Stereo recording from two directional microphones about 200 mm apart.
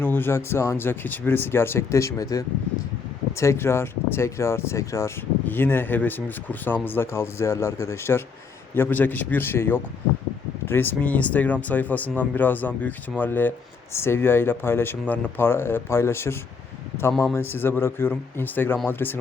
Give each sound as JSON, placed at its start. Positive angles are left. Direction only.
{"t": 0.0, "sound": "speech", "side_deg": 10}